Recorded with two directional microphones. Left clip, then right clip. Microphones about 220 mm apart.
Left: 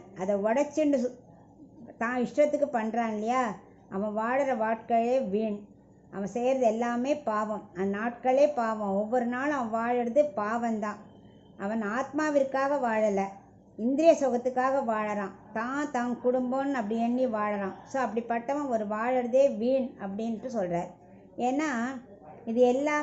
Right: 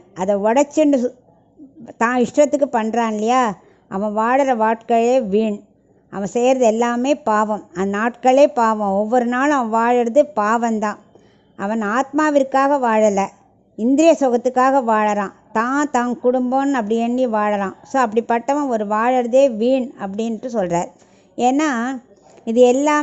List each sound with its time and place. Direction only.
0.2 s a woman's voice: 45° right (ahead or behind)